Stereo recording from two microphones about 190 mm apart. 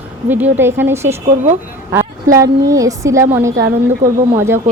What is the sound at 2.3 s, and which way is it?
Speech, 15° right (ahead or behind).